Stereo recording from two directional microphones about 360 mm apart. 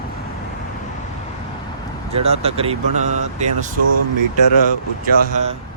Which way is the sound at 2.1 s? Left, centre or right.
Centre.